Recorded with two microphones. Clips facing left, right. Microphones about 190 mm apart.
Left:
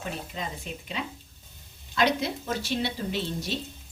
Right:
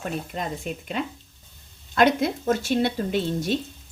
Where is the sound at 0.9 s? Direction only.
50° right (ahead or behind).